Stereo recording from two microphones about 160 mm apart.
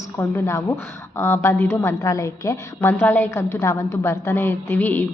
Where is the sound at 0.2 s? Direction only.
15° left (ahead or behind).